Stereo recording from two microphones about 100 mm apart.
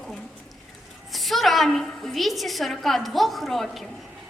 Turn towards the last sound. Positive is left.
turn(degrees=0)  # may be behind; listen again after turning